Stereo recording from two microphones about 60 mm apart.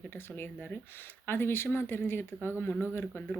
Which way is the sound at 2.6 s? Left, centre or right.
Left.